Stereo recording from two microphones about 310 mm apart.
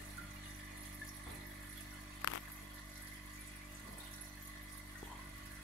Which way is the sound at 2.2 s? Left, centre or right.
Left.